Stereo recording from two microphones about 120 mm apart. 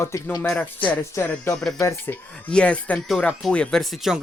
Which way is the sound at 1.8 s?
20° left (ahead or behind).